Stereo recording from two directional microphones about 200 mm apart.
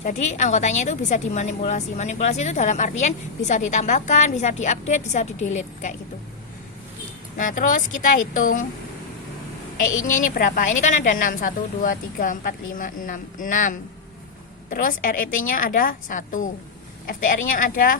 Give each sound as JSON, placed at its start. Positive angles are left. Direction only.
{"t": 0.0, "sound": "a woman's voice", "side_deg": 35}
{"t": 7.3, "sound": "a woman's voice", "side_deg": 40}
{"t": 10.1, "sound": "a woman's voice", "side_deg": 45}